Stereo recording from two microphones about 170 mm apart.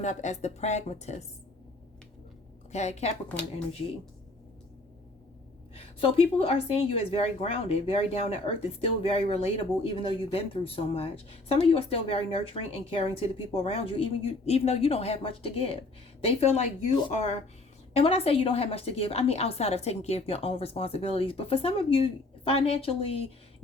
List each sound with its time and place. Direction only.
0.0 s a woman's voice: 45° left (ahead or behind)
2.7 s a woman's voice: 40° left (ahead or behind)
5.7 s a woman's voice: 35° left (ahead or behind)